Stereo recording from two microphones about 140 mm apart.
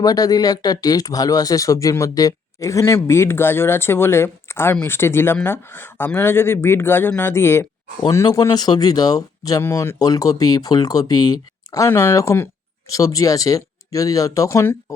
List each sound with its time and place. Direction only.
0.0 s speech: 25° left (ahead or behind)